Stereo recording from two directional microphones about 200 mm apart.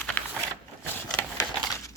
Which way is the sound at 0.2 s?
5° left (ahead or behind).